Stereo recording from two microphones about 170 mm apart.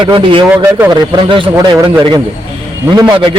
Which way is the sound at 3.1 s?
30° right (ahead or behind).